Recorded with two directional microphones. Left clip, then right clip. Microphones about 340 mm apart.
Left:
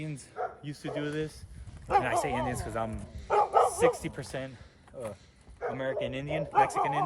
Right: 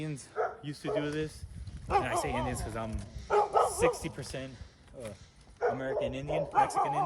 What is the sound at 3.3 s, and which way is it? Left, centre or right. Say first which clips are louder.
Bow-wow: left 2 dB; centre.